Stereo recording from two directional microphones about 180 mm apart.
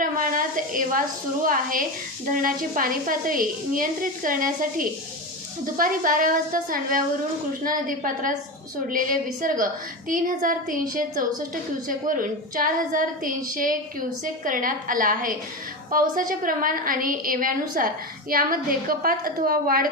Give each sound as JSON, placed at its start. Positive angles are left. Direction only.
{"t": 0.0, "sound": "sizzle", "side_deg": -50}
{"t": 1.5, "sound": "a woman's voice", "side_deg": -50}
{"t": 11.9, "sound": "a woman's voice", "side_deg": -50}